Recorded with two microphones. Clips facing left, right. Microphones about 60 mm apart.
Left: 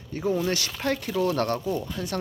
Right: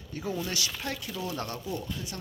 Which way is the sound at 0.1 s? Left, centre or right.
Left.